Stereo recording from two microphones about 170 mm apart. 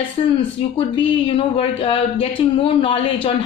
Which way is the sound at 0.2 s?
40° left (ahead or behind).